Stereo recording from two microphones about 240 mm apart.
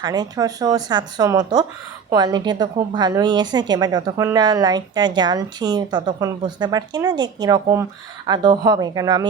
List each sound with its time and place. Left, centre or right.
0.0 s speech: centre